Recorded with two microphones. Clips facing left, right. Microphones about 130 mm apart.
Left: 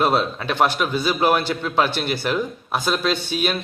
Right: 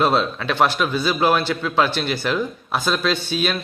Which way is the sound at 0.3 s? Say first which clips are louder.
Right 1 dB; 20° left (ahead or behind).